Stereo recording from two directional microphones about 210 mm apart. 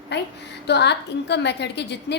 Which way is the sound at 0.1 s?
55° left (ahead or behind).